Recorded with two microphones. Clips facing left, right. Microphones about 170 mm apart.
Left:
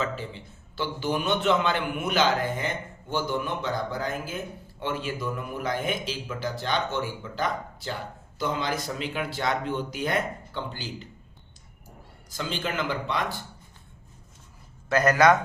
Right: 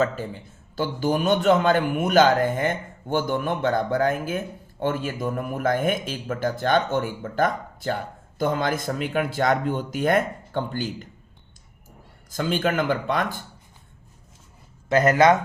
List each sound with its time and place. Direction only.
0.0 s a man's voice: 45° right (ahead or behind)
12.3 s a man's voice: 50° right (ahead or behind)
14.8 s speech: 25° right (ahead or behind)